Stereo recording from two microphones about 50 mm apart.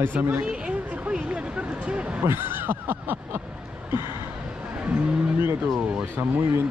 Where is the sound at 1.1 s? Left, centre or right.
Right.